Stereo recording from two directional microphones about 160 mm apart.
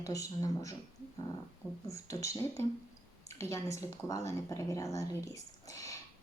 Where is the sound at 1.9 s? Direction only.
20° left (ahead or behind).